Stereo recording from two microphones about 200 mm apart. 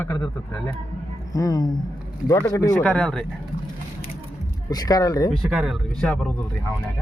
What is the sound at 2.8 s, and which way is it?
Speech, 5° left (ahead or behind).